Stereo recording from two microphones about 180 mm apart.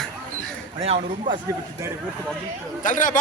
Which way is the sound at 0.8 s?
40° right (ahead or behind).